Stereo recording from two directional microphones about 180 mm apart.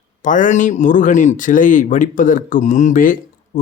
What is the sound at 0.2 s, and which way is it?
Speech, 45° left (ahead or behind).